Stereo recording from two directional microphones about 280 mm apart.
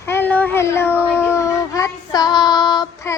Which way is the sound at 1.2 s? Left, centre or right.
Centre.